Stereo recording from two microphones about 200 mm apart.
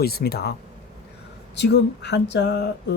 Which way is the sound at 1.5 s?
60° left (ahead or behind).